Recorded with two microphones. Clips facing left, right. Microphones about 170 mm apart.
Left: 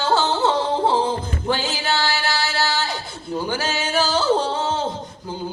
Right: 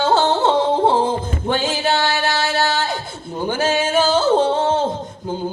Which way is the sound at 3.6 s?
50° right (ahead or behind).